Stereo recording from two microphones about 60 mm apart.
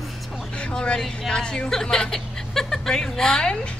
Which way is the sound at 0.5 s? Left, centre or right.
Centre.